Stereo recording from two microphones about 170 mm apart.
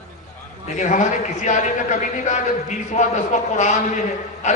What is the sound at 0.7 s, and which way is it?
A man's voice, 45° left (ahead or behind).